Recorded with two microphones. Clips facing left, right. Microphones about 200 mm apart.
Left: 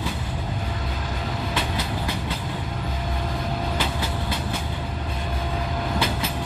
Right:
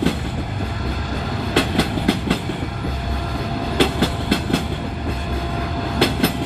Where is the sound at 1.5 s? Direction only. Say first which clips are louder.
Right 13 dB; 75° right (ahead or behind).